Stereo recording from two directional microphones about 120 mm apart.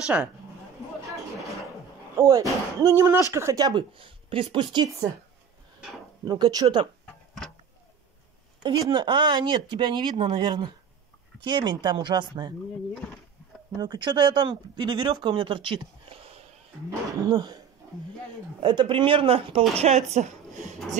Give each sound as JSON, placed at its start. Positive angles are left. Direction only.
{"t": 0.0, "sound": "speech", "side_deg": -5}
{"t": 1.4, "sound": "a sound", "side_deg": 0}
{"t": 2.1, "sound": "speech", "side_deg": -30}
{"t": 6.2, "sound": "speech", "side_deg": -35}
{"t": 8.9, "sound": "speech", "side_deg": -40}
{"t": 13.7, "sound": "speech", "side_deg": -40}
{"t": 19.7, "sound": "a woman's voice", "side_deg": -60}